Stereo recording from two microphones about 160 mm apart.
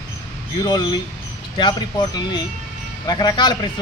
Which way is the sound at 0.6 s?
25° left (ahead or behind).